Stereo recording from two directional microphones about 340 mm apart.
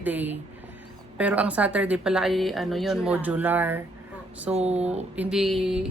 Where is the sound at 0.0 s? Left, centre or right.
Centre.